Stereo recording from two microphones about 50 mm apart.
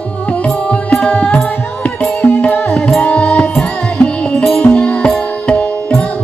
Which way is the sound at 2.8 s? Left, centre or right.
Centre.